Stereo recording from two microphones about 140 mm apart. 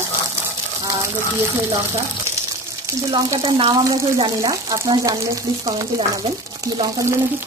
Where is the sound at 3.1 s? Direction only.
30° right (ahead or behind).